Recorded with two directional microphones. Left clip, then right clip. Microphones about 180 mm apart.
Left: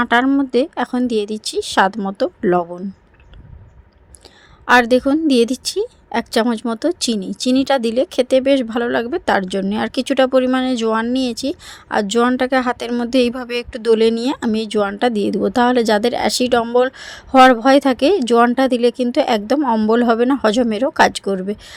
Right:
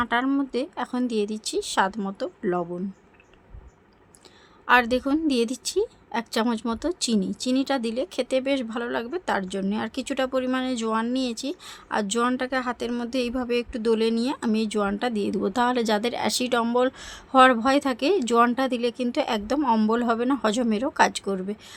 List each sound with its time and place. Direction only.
0.0 s a woman's voice: 40° left (ahead or behind)
4.6 s a woman's voice: 35° left (ahead or behind)